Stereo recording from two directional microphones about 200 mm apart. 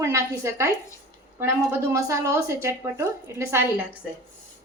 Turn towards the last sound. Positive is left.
turn(degrees=-15)  # may be behind; listen again after turning